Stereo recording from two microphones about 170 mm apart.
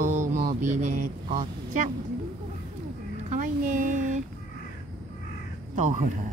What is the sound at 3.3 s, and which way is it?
Speech, 50° right (ahead or behind).